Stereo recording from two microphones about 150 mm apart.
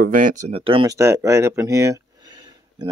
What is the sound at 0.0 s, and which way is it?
Speech, 65° right (ahead or behind).